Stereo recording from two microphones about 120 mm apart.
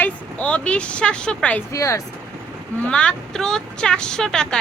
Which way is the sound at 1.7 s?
25° left (ahead or behind).